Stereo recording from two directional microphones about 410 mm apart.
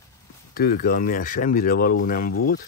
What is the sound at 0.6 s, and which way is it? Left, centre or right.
Speech, left.